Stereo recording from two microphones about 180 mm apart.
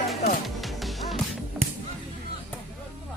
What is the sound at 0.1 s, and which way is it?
Music, centre (ahead or behind).